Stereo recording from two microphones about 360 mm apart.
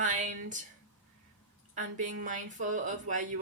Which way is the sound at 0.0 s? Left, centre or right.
Right.